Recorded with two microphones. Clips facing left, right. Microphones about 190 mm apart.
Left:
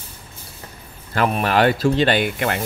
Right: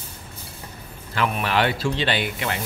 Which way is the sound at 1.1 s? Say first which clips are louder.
Left 4 dB; 45° left (ahead or behind).